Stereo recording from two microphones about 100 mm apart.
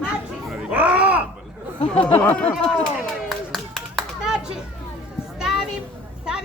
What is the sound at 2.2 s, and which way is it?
Speech, 15° left (ahead or behind).